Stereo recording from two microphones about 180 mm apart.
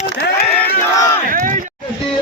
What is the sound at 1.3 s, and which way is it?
Speech, 45° right (ahead or behind).